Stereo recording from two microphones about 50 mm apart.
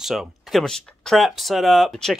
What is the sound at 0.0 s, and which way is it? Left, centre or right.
Speech, centre.